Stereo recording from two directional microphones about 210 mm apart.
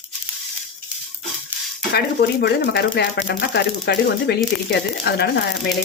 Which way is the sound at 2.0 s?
50° left (ahead or behind).